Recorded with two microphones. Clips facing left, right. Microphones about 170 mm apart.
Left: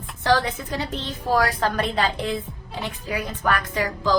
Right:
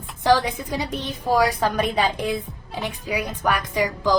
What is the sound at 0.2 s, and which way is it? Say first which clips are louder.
A woman's voice: right 2 dB; 15° right (ahead or behind).